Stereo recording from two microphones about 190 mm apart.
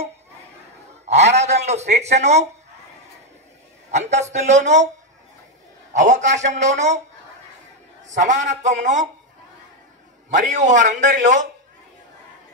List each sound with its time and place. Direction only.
1.0 s speech: 35° right (ahead or behind)
3.9 s a man's voice: 35° right (ahead or behind)
5.9 s a man's voice: 40° right (ahead or behind)
8.1 s a man's voice: 40° right (ahead or behind)
10.3 s a man's voice: 40° right (ahead or behind)